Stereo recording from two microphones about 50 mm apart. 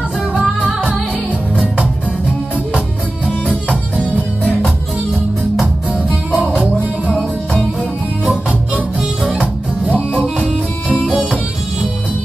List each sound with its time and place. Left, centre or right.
1.6 s music: centre
3.3 s music: left
6.0 s music: right
8.3 s music: right